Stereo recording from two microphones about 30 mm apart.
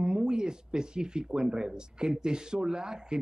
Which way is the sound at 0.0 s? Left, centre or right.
Right.